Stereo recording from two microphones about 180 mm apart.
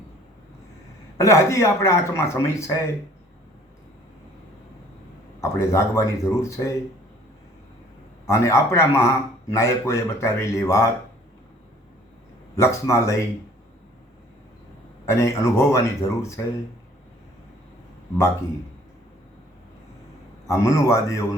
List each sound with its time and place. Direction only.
1.2 s speech: 15° left (ahead or behind)
5.4 s speech: 15° left (ahead or behind)
8.3 s speech: 15° left (ahead or behind)
12.5 s speech: 15° left (ahead or behind)
15.0 s speech: 15° left (ahead or behind)
20.5 s speech: 15° left (ahead or behind)